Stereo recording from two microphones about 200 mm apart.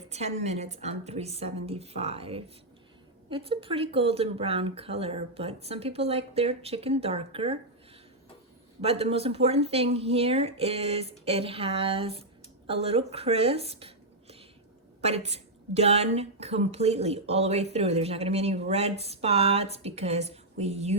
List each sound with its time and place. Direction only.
0.1 s a woman's voice: 35° right (ahead or behind)
8.8 s a woman's voice: 30° right (ahead or behind)